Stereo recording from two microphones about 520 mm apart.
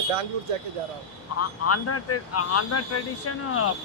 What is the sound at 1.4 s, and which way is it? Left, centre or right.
Speech, left.